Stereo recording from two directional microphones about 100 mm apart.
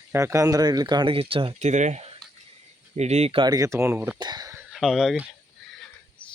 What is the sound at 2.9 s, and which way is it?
Speech, 90° right.